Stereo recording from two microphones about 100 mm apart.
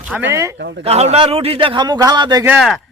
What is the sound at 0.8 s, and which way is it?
A man's voice, 90° right.